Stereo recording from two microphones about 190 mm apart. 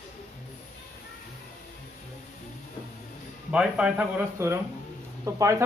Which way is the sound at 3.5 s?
5° right (ahead or behind).